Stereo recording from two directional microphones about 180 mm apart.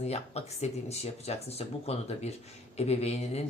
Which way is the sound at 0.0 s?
35° left (ahead or behind).